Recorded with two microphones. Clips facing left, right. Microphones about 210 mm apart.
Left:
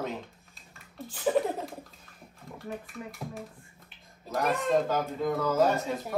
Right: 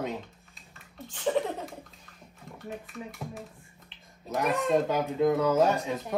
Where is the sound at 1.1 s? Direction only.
5° left (ahead or behind).